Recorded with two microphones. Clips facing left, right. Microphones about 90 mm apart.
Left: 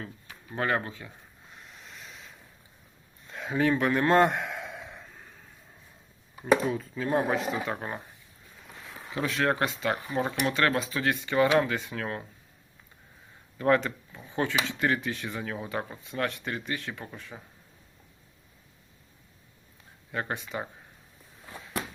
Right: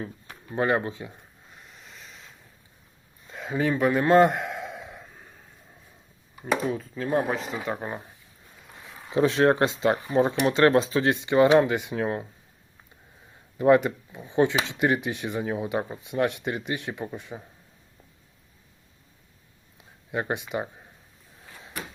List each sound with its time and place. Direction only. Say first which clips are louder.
0.5 s speech: right 4 dB; 20° right (ahead or behind)
1.5 s a sound: left 1 dB; centre (ahead or behind)
3.2 s a sound: even; centre (ahead or behind)
6.4 s speech: left 2 dB; centre (ahead or behind)
9.1 s speech: right 7 dB; 30° right (ahead or behind)
13.6 s speech: right 5 dB; 15° right (ahead or behind)
20.1 s speech: right 4 dB; 15° right (ahead or behind)